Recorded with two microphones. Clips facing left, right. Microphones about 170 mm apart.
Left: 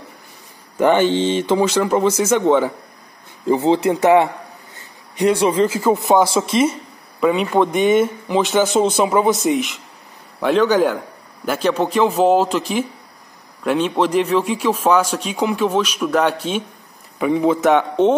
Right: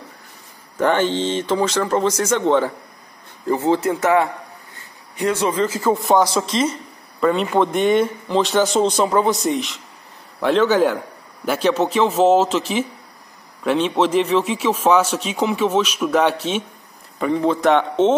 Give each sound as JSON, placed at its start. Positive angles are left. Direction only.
{"t": 0.7, "sound": "a man's voice", "side_deg": 10}
{"t": 4.7, "sound": "a sound", "side_deg": 15}
{"t": 6.5, "sound": "speech", "side_deg": 10}